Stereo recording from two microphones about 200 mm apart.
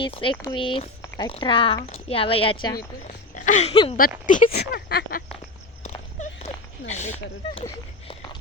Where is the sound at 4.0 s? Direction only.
45° left (ahead or behind).